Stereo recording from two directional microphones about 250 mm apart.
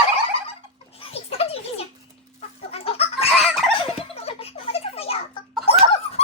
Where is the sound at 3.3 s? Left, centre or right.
Centre.